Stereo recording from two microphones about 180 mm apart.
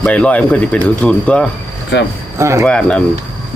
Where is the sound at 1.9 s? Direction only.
75° left (ahead or behind).